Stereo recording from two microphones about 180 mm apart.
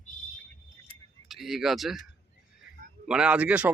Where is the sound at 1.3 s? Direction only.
Centre (ahead or behind).